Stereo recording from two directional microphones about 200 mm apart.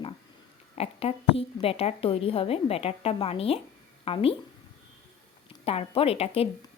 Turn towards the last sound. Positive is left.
turn(degrees=30)  # may be behind; listen again after turning